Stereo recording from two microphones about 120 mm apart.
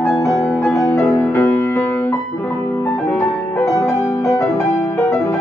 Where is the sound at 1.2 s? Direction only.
15° left (ahead or behind).